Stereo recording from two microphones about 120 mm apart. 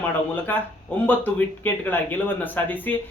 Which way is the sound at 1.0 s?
15° left (ahead or behind).